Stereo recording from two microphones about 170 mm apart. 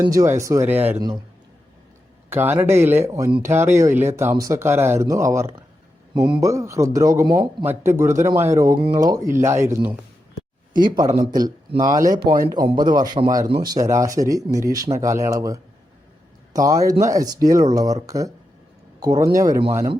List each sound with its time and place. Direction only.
0.1 s speech: 20° right (ahead or behind)
2.3 s speech: 10° right (ahead or behind)